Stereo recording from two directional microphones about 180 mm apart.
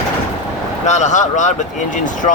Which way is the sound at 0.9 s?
40° left (ahead or behind).